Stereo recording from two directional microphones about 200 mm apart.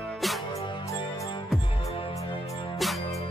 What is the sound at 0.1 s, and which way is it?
Music, centre (ahead or behind).